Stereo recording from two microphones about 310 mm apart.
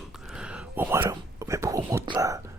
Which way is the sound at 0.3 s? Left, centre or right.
Centre.